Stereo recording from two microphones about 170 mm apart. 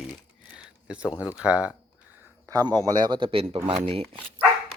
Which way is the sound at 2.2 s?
20° right (ahead or behind).